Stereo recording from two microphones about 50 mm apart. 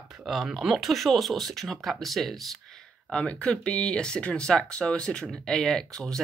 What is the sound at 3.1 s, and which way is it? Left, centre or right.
Speech, left.